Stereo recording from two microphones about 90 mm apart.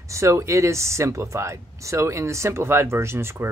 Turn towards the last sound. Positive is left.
turn(degrees=-30)  # may be behind; listen again after turning